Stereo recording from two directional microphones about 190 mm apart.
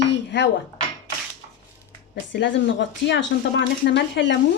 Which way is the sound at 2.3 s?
70° left (ahead or behind).